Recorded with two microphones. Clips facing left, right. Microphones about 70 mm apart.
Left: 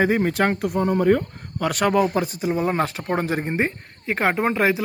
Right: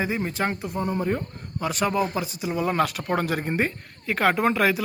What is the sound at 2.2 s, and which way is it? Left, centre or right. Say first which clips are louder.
Speech: left 4 dB; left.